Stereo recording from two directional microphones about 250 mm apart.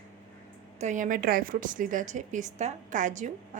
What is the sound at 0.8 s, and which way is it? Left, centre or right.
A woman's voice, right.